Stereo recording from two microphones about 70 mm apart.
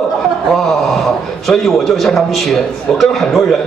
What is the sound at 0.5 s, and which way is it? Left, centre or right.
A man's voice, centre.